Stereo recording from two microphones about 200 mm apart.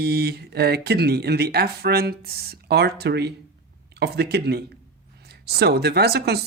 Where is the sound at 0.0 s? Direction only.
50° right (ahead or behind).